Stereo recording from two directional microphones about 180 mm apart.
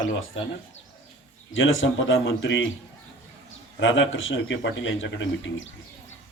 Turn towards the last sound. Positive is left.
turn(degrees=90)